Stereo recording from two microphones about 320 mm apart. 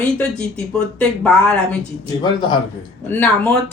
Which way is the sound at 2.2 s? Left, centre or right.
Centre.